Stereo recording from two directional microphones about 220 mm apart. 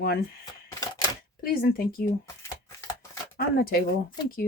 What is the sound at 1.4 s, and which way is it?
Speech, 40° left (ahead or behind).